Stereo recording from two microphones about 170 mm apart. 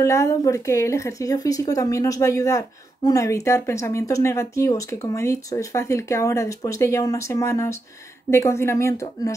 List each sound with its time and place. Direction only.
0.0 s speech: 15° left (ahead or behind)